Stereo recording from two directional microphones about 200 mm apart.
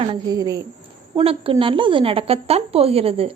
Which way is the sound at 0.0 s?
25° right (ahead or behind).